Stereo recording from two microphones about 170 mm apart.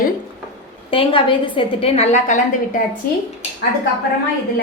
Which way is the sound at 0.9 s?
30° left (ahead or behind).